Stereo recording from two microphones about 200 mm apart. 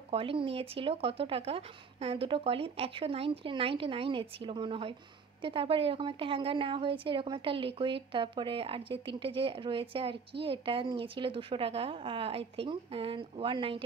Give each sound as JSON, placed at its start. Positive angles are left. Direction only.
{"t": 0.1, "sound": "speech", "side_deg": -25}